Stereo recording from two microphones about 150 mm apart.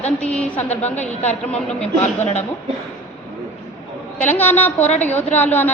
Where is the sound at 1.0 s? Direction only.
45° left (ahead or behind).